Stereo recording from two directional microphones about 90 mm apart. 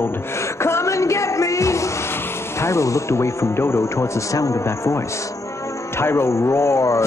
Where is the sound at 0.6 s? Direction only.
30° left (ahead or behind).